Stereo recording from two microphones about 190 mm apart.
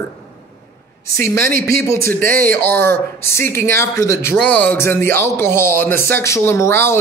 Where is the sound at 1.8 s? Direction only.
15° left (ahead or behind).